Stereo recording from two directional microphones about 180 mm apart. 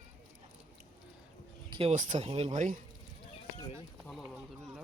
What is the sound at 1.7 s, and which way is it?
Speech, 30° right (ahead or behind).